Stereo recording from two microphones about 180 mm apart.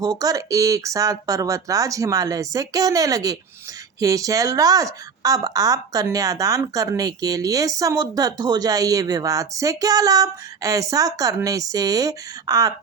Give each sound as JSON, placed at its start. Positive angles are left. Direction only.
{"t": 0.0, "sound": "a woman's voice", "side_deg": -20}